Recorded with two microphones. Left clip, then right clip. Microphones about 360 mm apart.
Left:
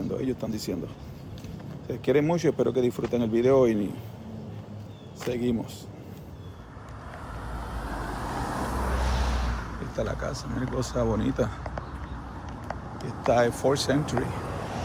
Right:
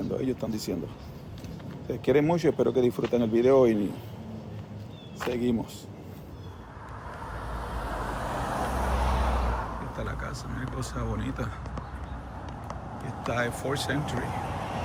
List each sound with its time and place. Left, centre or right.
0.1 s speech: centre
1.9 s speech: centre
5.2 s speech: centre
7.6 s vehicle: centre
7.9 s vehicle: right
9.9 s speech: centre
13.2 s speech: centre
14.3 s vehicle: right